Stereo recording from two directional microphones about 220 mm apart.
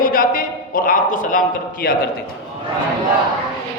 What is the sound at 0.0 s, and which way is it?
A man's voice, 40° left (ahead or behind).